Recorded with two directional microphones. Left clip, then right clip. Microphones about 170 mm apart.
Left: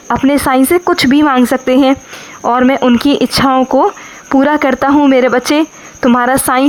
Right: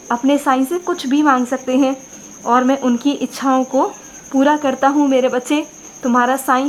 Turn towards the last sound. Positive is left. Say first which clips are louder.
# left 4 dB
turn(degrees=30)  # may be behind; listen again after turning